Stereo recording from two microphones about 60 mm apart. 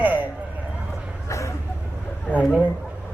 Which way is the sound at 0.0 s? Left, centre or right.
Right.